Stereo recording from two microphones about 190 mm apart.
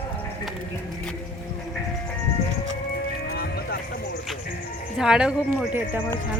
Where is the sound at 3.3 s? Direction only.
55° left (ahead or behind).